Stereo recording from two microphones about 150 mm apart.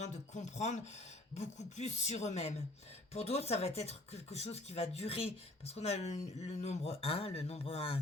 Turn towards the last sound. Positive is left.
turn(degrees=40)  # may be behind; listen again after turning